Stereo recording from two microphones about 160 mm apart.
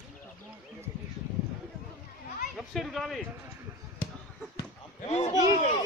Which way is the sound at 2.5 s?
Centre (ahead or behind).